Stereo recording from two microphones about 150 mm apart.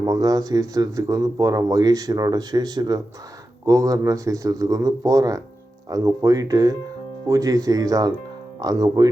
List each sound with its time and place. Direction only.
0.0 s speech: 25° right (ahead or behind)